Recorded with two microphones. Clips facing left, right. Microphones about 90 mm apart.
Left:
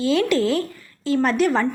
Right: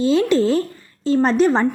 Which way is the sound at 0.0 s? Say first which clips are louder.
Right 3 dB; 30° right (ahead or behind).